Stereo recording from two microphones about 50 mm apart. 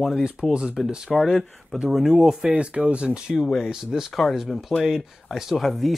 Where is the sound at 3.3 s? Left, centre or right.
Centre.